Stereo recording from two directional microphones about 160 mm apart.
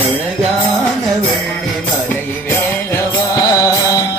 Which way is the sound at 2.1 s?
15° left (ahead or behind).